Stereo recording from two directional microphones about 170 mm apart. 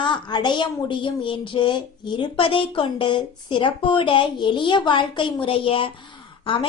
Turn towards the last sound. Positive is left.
turn(degrees=30)  # may be behind; listen again after turning